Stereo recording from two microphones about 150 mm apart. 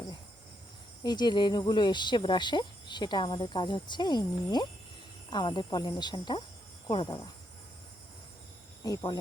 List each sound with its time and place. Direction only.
1.0 s speech: 30° left (ahead or behind)
8.8 s speech: 25° left (ahead or behind)